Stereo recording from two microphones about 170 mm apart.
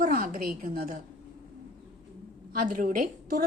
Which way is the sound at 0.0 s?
55° right (ahead or behind).